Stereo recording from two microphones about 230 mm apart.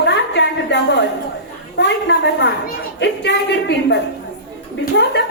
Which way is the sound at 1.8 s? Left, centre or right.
Left.